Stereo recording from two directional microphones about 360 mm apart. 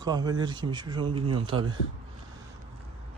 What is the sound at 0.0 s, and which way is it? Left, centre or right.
Speech, centre.